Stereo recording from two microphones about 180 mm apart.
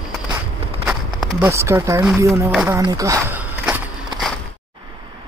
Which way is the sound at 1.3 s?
15° right (ahead or behind).